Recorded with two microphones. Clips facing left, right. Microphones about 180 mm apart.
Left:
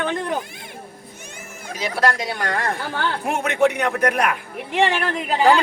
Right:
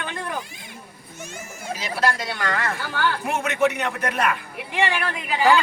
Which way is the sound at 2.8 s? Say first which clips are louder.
Left 1 dB; 50° left (ahead or behind).